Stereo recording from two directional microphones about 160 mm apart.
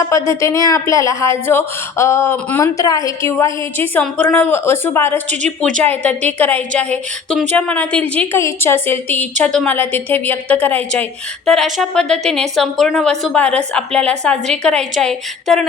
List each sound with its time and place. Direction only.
0.0 s a woman's voice: 20° left (ahead or behind); by 15.6 s centre (ahead or behind)